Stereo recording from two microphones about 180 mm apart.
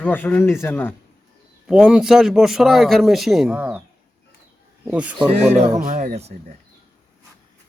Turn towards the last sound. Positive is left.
turn(degrees=-40)  # may be behind; listen again after turning